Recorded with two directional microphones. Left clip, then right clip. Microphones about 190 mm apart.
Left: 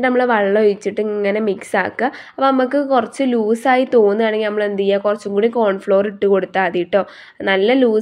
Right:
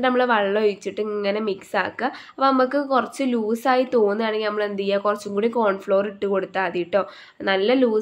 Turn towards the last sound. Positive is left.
turn(degrees=15)  # may be behind; listen again after turning